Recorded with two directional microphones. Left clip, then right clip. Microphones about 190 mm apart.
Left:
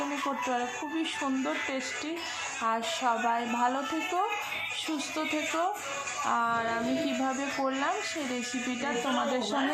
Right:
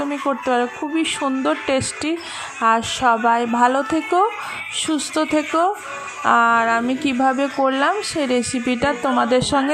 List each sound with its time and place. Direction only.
0.4 s speech: 35° right (ahead or behind)